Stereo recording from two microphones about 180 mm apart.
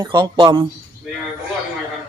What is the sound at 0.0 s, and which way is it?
Speech, 25° right (ahead or behind).